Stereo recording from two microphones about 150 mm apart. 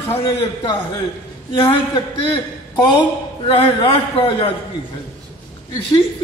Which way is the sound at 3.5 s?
40° left (ahead or behind).